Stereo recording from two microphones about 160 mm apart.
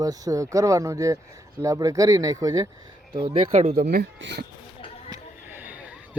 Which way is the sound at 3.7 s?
70° right (ahead or behind).